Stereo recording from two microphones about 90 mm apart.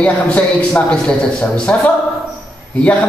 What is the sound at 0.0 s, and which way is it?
A man's voice, 15° left (ahead or behind).